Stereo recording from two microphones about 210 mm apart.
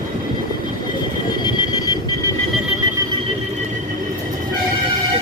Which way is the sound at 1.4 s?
20° left (ahead or behind).